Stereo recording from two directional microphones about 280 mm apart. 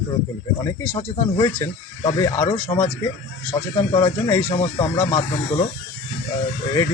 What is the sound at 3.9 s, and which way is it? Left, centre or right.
A man's voice, centre.